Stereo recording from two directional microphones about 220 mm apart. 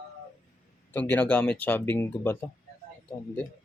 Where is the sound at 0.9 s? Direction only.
10° left (ahead or behind).